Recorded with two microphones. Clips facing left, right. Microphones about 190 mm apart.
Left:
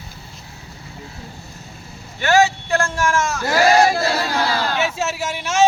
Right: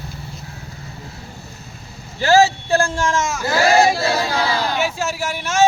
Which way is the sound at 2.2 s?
35° right (ahead or behind).